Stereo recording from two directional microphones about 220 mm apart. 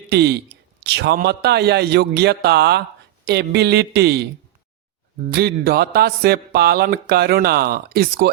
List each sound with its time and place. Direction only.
0.1 s speech: 50° right (ahead or behind)